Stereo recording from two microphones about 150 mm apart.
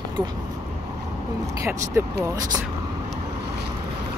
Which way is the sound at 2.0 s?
15° right (ahead or behind).